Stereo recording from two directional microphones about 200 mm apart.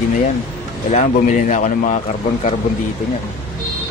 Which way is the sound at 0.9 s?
35° left (ahead or behind).